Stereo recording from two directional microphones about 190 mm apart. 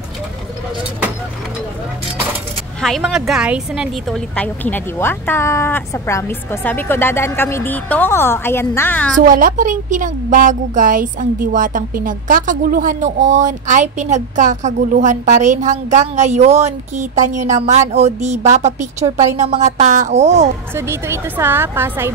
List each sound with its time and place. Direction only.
2.8 s speech: centre (ahead or behind)
4.4 s a woman's voice: 10° left (ahead or behind)
9.2 s a woman's voice: 45° right (ahead or behind)
20.7 s a woman's voice: 10° right (ahead or behind)